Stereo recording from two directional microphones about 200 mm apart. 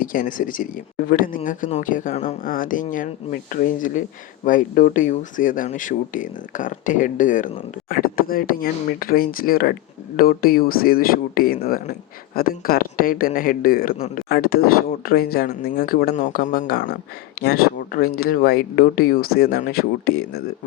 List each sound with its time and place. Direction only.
0.0 s speech: 45° left (ahead or behind)